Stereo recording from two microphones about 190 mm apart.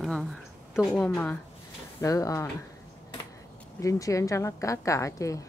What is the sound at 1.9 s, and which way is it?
Speech, 15° left (ahead or behind).